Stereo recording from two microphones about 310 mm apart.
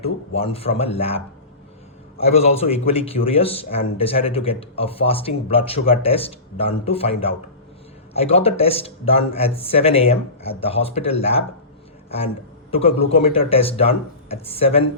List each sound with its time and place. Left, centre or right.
0.0 s a man's voice: centre
12.7 s a man's voice: centre